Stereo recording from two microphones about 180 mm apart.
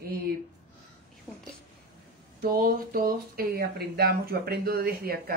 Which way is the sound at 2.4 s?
55° right (ahead or behind).